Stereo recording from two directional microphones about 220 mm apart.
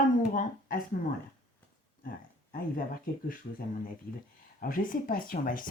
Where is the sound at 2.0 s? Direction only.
40° left (ahead or behind).